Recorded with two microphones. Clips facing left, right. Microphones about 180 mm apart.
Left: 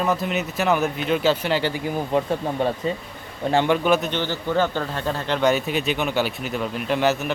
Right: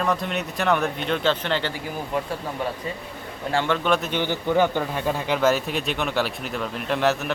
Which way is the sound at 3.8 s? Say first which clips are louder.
Left 3 dB; 5° left (ahead or behind).